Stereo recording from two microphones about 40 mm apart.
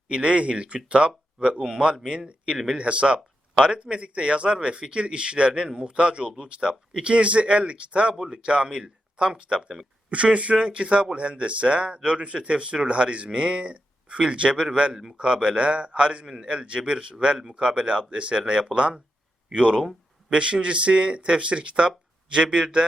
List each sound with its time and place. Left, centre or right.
0.1 s speech: right